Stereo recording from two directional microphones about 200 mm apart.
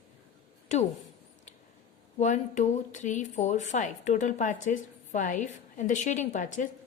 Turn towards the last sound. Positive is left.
turn(degrees=40)  # may be behind; listen again after turning